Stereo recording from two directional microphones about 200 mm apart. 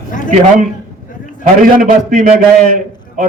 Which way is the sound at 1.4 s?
45° right (ahead or behind).